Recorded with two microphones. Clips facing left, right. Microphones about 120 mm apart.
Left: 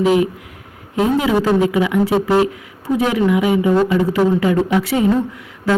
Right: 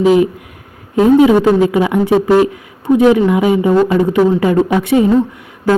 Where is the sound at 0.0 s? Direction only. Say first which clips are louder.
Right 4 dB; 25° right (ahead or behind).